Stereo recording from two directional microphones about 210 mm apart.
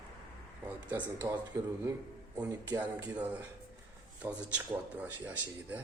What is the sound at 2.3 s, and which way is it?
Speech, 10° right (ahead or behind).